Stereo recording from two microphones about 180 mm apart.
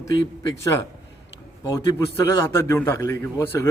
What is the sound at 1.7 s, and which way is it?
A man's voice, 15° left (ahead or behind).